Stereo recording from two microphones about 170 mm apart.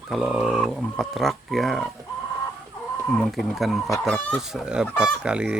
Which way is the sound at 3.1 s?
Centre (ahead or behind).